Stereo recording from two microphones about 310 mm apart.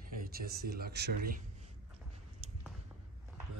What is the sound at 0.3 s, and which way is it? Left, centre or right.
Speech, right.